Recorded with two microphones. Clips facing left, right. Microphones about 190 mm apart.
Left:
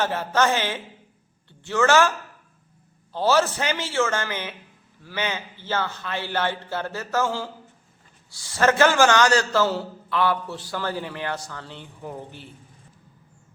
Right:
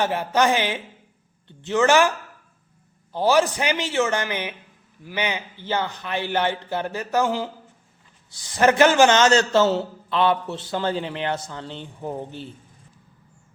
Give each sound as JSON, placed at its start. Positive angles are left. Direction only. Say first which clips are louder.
{"t": 0.0, "sound": "a man's voice", "louder": "right 2 dB", "side_deg": -15}